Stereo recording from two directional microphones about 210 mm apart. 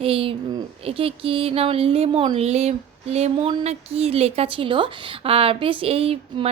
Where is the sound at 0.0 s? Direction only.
25° right (ahead or behind).